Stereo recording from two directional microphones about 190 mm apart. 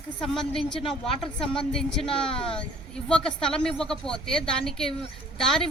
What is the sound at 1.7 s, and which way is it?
A woman's voice, 5° left (ahead or behind).